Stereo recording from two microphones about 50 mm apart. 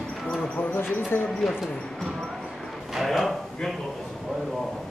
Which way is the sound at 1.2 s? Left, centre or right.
Centre.